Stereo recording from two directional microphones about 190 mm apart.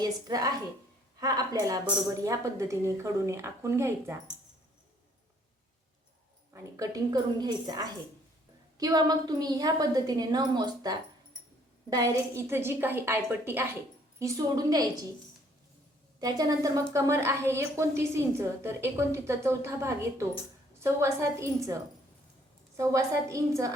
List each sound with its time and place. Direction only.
0.0 s a woman's voice: 20° right (ahead or behind)
6.5 s a woman's voice: 20° right (ahead or behind)
16.2 s a woman's voice: 20° right (ahead or behind)
22.8 s a woman's voice: 15° right (ahead or behind)